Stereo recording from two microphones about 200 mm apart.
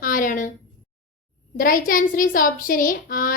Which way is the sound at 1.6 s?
45° left (ahead or behind).